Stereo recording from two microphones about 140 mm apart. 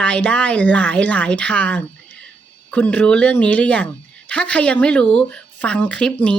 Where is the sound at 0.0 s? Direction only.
10° left (ahead or behind).